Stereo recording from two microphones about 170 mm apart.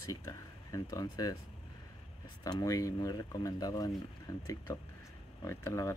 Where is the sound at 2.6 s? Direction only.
20° left (ahead or behind).